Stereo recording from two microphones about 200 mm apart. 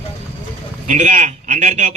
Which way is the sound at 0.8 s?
40° right (ahead or behind).